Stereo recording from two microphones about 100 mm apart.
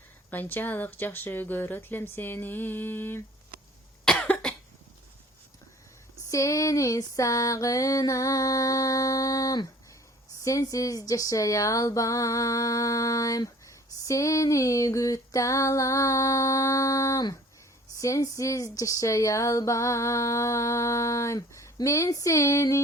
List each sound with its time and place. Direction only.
0.3 s speech: 20° left (ahead or behind)
4.0 s cough: 10° left (ahead or behind)
6.2 s a sound: 30° left (ahead or behind)
21.8 s speech: 30° left (ahead or behind)